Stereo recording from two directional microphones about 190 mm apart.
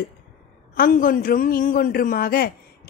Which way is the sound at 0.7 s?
45° left (ahead or behind).